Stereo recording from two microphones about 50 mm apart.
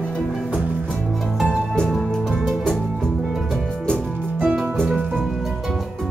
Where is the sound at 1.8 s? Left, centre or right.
Centre.